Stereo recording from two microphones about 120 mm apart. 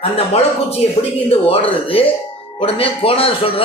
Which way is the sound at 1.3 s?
50° left (ahead or behind).